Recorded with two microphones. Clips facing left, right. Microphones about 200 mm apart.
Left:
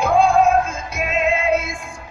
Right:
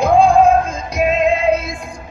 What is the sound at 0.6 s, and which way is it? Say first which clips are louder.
Music: right 6 dB; 35° right (ahead or behind).